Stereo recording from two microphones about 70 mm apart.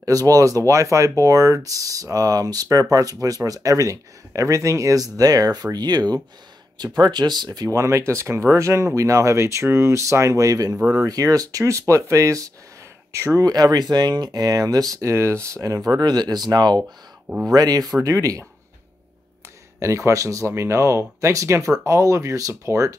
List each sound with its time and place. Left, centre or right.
0.0 s speech: right
7.7 s speech: right
13.4 s speech: right
15.0 s speech: right
16.0 s speech: right
17.5 s speech: right
19.8 s speech: right